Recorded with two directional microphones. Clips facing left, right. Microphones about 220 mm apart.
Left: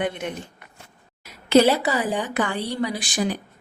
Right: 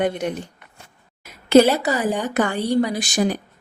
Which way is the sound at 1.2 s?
45° right (ahead or behind).